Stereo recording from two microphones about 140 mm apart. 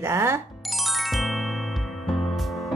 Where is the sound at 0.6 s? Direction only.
Centre (ahead or behind).